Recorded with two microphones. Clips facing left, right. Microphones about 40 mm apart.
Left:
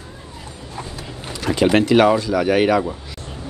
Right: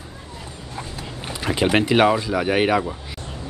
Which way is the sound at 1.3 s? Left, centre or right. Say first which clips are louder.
Left 3 dB; centre.